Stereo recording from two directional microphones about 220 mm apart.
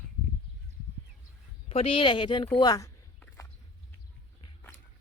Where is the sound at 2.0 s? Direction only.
25° left (ahead or behind).